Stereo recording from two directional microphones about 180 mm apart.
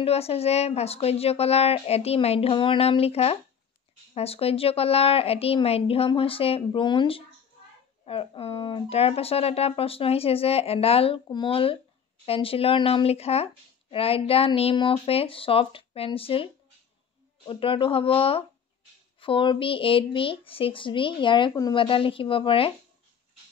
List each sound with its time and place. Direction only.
0.0 s speech: 35° left (ahead or behind)
17.5 s speech: 30° left (ahead or behind)